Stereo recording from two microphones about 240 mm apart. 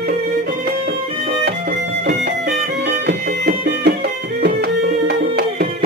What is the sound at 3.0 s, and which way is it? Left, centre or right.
Music, right.